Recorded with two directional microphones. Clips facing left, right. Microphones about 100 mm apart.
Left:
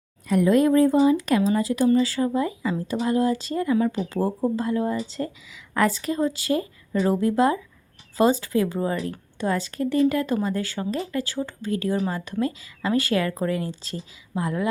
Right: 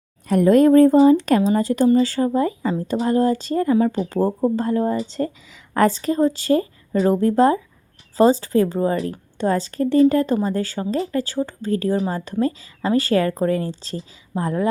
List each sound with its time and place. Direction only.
0.3 s speech: 45° right (ahead or behind)